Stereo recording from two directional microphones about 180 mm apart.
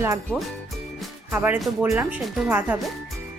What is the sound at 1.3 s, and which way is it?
A woman's voice, 10° right (ahead or behind).